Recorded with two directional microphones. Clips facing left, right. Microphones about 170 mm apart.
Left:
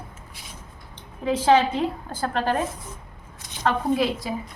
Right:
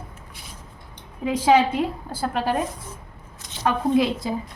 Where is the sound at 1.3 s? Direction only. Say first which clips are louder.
Right 1 dB; 10° right (ahead or behind).